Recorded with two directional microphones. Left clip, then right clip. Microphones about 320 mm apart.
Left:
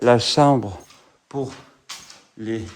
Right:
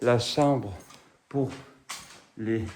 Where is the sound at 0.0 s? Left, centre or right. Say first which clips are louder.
Left 8 dB; left.